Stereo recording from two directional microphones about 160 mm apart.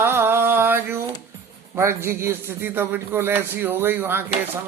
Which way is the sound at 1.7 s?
15° right (ahead or behind).